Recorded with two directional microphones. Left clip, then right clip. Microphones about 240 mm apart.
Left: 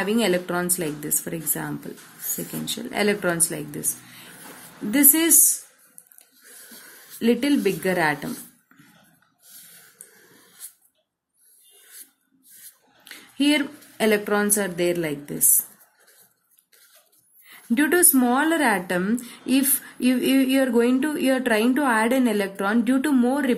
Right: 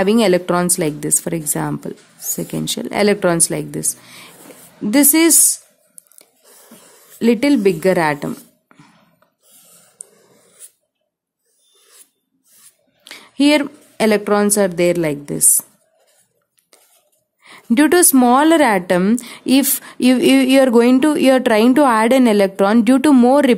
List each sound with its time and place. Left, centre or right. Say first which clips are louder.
0.0 s a woman's voice: right 8 dB; right
7.1 s a woman's voice: right 7 dB; right
13.0 s a woman's voice: right 7 dB; right
17.4 s a woman's voice: right 8 dB; right